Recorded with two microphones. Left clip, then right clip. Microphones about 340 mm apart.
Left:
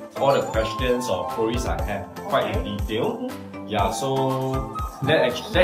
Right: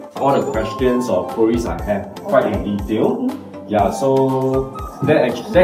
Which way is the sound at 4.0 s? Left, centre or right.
Left.